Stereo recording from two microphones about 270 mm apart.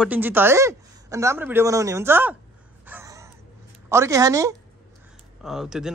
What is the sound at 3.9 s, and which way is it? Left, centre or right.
A man's voice, centre.